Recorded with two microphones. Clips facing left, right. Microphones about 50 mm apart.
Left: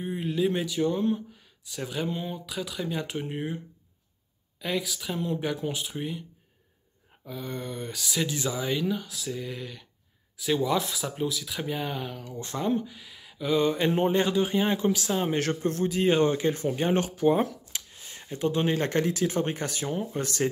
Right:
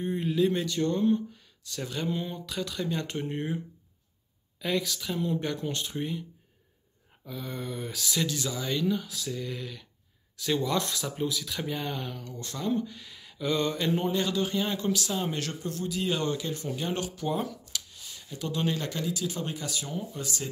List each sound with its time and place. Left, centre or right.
0.0 s speech: centre
4.6 s speech: centre
7.2 s speech: centre
8.2 s speech: centre
12.4 s speech: left
12.7 s a sound: centre
13.8 s speech: left
18.9 s speech: left